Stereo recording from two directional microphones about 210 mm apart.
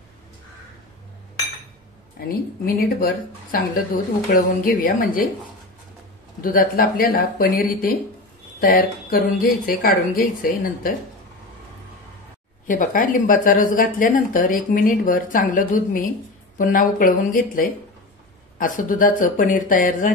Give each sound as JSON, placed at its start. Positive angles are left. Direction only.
{"t": 2.1, "sound": "a woman's voice", "side_deg": 45}
{"t": 6.4, "sound": "a woman's voice", "side_deg": 40}
{"t": 12.6, "sound": "speech", "side_deg": 40}